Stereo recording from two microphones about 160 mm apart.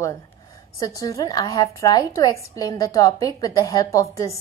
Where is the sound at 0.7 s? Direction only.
20° left (ahead or behind).